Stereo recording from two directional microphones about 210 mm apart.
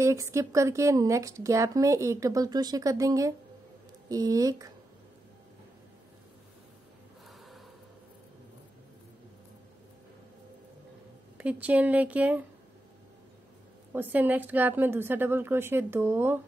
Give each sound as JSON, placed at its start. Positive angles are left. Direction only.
{"t": 0.0, "sound": "a woman's voice", "side_deg": -15}
{"t": 11.3, "sound": "a woman's voice", "side_deg": -5}
{"t": 13.9, "sound": "a woman's voice", "side_deg": -10}